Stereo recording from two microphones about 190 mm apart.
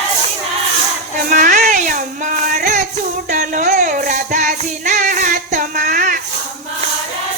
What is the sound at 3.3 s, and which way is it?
Music, 45° right (ahead or behind).